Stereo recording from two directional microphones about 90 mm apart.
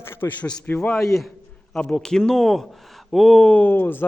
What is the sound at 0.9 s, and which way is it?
A man's voice, centre (ahead or behind).